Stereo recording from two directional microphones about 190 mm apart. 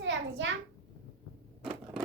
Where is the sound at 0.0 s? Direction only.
75° right (ahead or behind).